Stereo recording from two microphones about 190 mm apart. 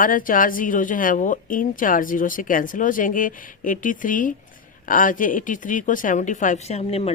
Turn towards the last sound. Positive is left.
turn(degrees=30)  # may be behind; listen again after turning